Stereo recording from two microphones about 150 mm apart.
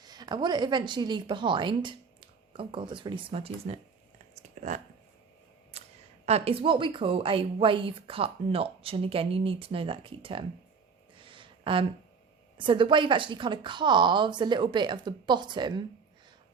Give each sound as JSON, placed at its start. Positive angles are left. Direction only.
{"t": 0.0, "sound": "a woman's voice", "side_deg": -25}
{"t": 4.6, "sound": "speech", "side_deg": -60}
{"t": 5.7, "sound": "a sound", "side_deg": -45}
{"t": 6.2, "sound": "a woman's voice", "side_deg": -40}
{"t": 11.2, "sound": "a sound", "side_deg": -35}
{"t": 12.5, "sound": "a woman's voice", "side_deg": -35}